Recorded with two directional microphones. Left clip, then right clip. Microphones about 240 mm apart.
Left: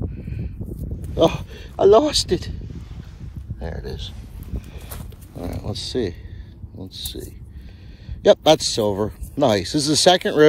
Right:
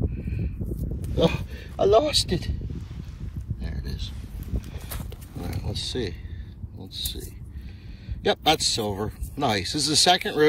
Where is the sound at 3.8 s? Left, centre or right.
Centre.